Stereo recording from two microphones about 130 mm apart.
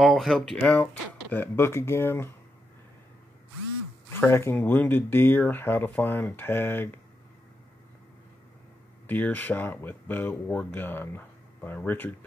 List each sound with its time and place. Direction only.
0.0 s speech: centre (ahead or behind); by 2.3 s 15° left (ahead or behind)
4.1 s speech: 20° left (ahead or behind)
9.0 s speech: 15° left (ahead or behind)